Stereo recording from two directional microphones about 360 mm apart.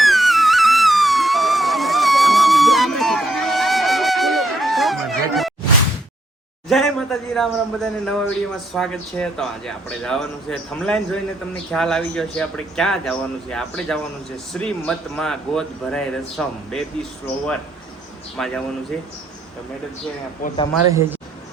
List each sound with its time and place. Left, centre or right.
0.0 s music: centre
6.7 s a man's voice: centre
18.3 s a man's voice: centre
20.4 s a man's voice: left